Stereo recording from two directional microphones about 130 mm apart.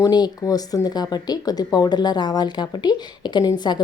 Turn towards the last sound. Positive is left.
turn(degrees=35)  # may be behind; listen again after turning